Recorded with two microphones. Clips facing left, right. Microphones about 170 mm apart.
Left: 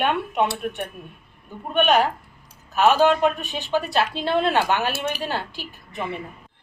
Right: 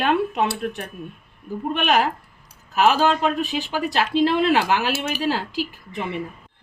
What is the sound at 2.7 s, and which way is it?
Speech, 90° right.